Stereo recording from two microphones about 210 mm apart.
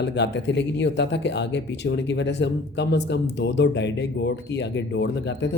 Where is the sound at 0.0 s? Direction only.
55° left (ahead or behind).